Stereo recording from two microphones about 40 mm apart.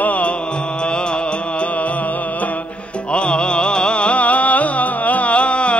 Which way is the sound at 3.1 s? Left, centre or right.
Left.